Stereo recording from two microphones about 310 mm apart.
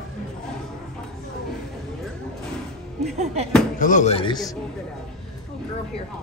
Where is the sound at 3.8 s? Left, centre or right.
Left.